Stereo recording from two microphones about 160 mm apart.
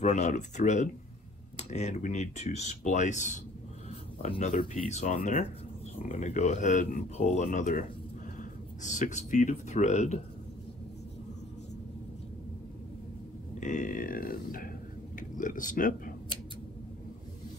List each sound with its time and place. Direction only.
0.0 s speech: 45° left (ahead or behind)
8.8 s speech: 50° left (ahead or behind)
13.6 s speech: 50° left (ahead or behind)